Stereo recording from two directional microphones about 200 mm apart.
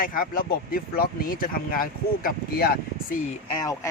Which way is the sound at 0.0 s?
45° left (ahead or behind).